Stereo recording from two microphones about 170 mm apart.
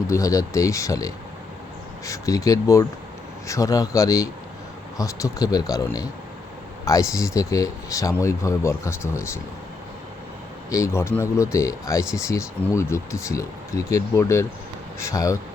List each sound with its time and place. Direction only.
0.1 s speech: 20° left (ahead or behind)
10.7 s speech: 15° left (ahead or behind)